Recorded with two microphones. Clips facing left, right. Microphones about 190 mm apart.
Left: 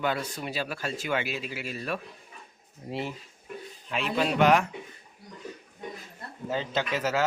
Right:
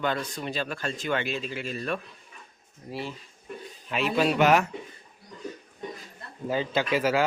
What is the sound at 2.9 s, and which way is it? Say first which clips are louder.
Speech: left 2 dB; 20° left (ahead or behind).